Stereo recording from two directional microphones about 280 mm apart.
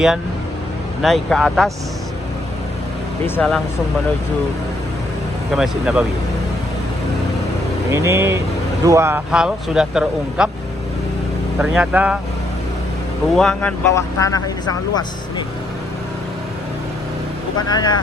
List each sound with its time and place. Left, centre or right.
1.0 s speech: centre
3.2 s speech: centre
5.5 s speech: centre
7.9 s speech: centre
11.6 s speech: centre
13.3 s speech: centre
17.6 s speech: centre